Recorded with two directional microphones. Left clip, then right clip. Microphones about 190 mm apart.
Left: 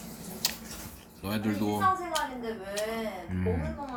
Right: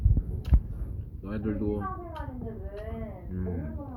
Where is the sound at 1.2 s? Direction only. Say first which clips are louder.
Left 1 dB; 15° left (ahead or behind).